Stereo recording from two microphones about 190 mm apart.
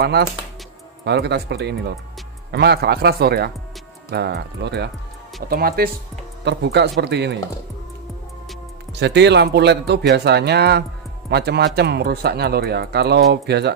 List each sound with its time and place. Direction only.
0.0 s speech: 60° right (ahead or behind)
5.5 s speech: 50° right (ahead or behind)
6.4 s speech: 65° right (ahead or behind)
9.0 s speech: 65° right (ahead or behind)